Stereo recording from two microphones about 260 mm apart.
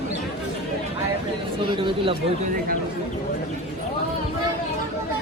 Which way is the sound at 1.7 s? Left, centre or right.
Centre.